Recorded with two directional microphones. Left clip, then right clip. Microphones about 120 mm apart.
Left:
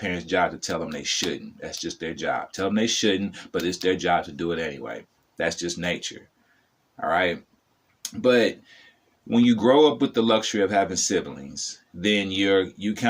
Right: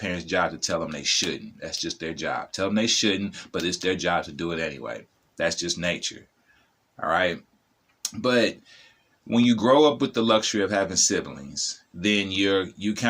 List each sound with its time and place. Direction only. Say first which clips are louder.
0.0 s speech: left 2 dB; 20° right (ahead or behind)